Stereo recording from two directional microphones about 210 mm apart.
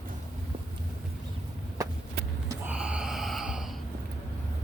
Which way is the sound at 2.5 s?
5° right (ahead or behind).